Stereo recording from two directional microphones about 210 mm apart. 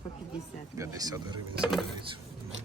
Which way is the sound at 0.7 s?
15° right (ahead or behind).